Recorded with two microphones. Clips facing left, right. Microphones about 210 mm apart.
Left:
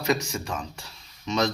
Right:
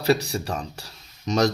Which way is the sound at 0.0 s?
35° right (ahead or behind).